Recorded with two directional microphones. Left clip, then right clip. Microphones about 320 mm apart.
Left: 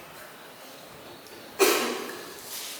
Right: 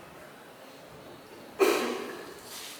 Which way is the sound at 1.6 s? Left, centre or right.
Centre.